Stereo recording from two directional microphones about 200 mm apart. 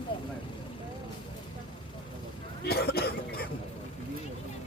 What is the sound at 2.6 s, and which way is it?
Cough, 50° left (ahead or behind).